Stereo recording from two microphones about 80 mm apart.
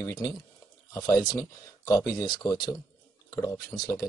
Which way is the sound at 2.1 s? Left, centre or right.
Left.